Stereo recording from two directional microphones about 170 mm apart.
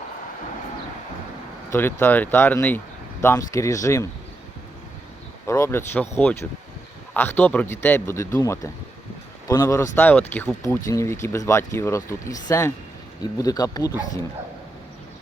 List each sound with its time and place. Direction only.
1.7 s speech: 15° left (ahead or behind)
5.5 s speech: 15° left (ahead or behind)